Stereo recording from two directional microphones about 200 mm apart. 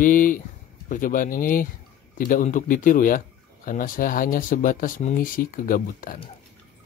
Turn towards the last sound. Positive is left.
turn(degrees=45)  # may be behind; listen again after turning